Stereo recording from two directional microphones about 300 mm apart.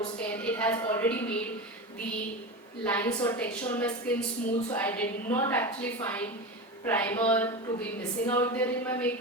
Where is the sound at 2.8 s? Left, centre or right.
Centre.